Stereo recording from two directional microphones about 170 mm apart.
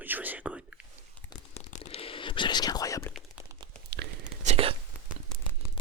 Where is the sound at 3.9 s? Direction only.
75° right (ahead or behind).